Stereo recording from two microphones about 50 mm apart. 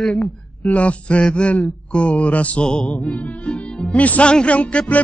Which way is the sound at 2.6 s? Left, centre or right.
Centre.